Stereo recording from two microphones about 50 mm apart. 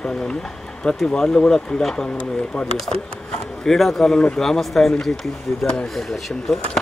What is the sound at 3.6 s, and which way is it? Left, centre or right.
Speech, centre.